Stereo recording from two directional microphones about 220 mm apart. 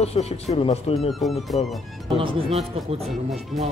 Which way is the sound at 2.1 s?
25° right (ahead or behind).